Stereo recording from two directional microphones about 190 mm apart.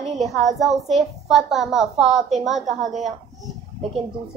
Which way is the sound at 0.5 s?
Centre (ahead or behind).